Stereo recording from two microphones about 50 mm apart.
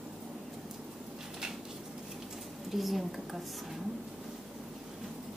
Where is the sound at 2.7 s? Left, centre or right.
Centre.